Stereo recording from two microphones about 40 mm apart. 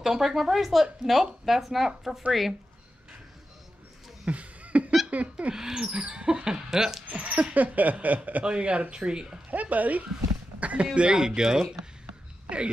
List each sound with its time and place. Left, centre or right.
0.0 s speech: centre
4.3 s a sound: right
5.1 s speech: right
5.5 s speech: centre
5.9 s rodents: right
7.1 s rodents: right
7.5 s a sound: right
8.5 s rodents: right
9.5 s speech: right
10.6 s a sound: right
11.0 s speech: right
12.4 s speech: right